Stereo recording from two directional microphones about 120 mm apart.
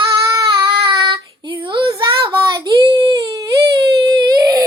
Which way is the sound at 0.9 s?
35° right (ahead or behind).